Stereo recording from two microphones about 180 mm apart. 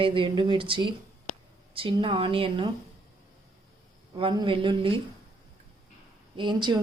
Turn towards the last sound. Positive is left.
turn(degrees=-25)  # may be behind; listen again after turning